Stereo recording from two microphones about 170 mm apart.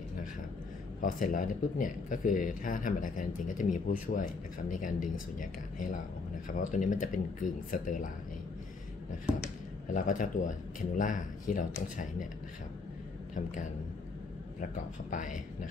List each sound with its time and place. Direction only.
1.0 s speech: 55° left (ahead or behind)
9.3 s speech: 5° right (ahead or behind)
9.8 s speech: 50° left (ahead or behind)
14.6 s speech: 50° left (ahead or behind)